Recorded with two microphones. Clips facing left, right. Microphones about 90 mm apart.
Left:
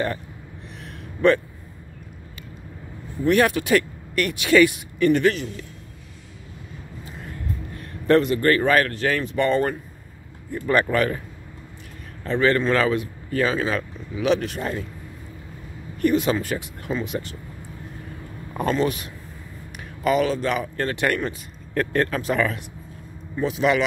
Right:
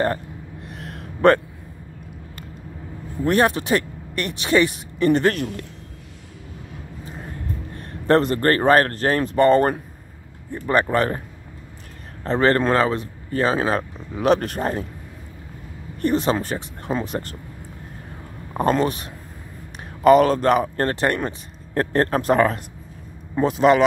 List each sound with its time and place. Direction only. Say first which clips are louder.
0.7 s a sound: right 2 dB; 45° right (ahead or behind)
3.3 s speech: even; 35° right (ahead or behind)
5.3 s a man's voice: right 3 dB; 60° right (ahead or behind)
7.7 s speech: even; 40° right (ahead or behind)
10.5 s speech: right 1 dB; 25° right (ahead or behind); by 12.7 s 45° right (ahead or behind)
12.7 s speech: right 1 dB; 35° right (ahead or behind)
16.0 s speech: even; 35° right (ahead or behind)
18.7 s speech: right 2 dB; 40° right (ahead or behind)
20.0 s speech: right 7 dB; 50° right (ahead or behind)